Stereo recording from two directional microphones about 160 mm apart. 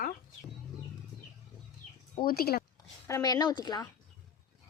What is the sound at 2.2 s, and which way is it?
Speech, 75° left (ahead or behind).